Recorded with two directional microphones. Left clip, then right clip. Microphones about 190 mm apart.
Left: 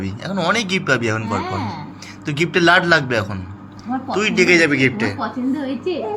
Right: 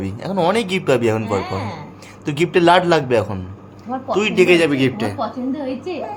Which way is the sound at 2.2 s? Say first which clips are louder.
Right 1 dB; 25° right (ahead or behind).